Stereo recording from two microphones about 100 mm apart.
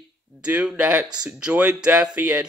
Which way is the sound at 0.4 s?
15° right (ahead or behind).